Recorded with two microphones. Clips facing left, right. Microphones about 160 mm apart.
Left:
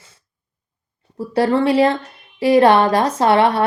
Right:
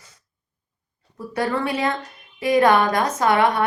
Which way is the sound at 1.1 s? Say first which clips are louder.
Left 7 dB; 30° left (ahead or behind).